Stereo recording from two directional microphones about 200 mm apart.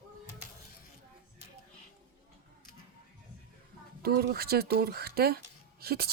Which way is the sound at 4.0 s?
55° right (ahead or behind).